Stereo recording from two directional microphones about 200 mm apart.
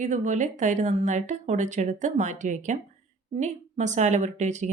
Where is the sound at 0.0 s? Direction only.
40° right (ahead or behind).